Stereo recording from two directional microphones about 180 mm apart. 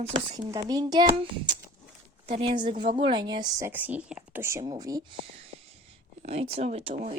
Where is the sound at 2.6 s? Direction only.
25° right (ahead or behind).